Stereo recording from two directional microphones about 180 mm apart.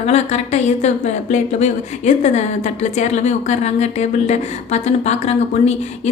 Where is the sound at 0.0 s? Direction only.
40° left (ahead or behind).